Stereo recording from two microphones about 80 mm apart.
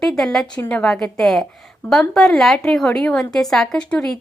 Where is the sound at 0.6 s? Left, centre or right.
Centre.